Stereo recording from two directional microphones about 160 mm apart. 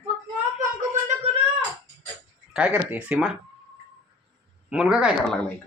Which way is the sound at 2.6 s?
10° right (ahead or behind).